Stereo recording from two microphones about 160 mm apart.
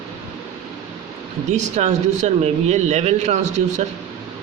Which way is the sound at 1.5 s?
45° right (ahead or behind).